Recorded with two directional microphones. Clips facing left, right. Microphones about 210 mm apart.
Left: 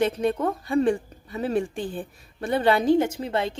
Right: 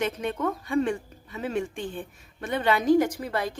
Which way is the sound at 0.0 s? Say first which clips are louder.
Left 5 dB; 35° left (ahead or behind).